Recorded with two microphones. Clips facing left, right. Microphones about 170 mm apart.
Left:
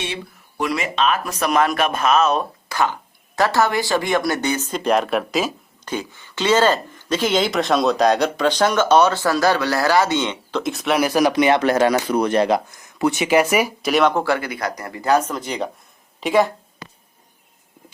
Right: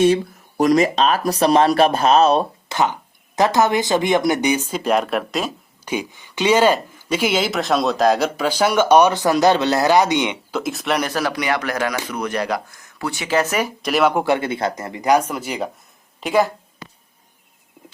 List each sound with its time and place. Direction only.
0.0 s speech: 40° right (ahead or behind); by 5.5 s centre (ahead or behind)
5.8 s speech: 10° right (ahead or behind); by 11.2 s 5° left (ahead or behind)
11.2 s speech: 20° left (ahead or behind)
13.9 s a woman's voice: 10° right (ahead or behind)